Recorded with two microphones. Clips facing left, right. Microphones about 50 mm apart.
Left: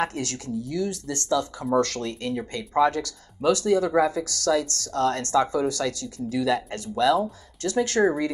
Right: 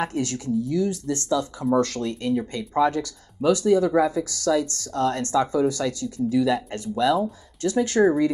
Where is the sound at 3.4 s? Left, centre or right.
Centre.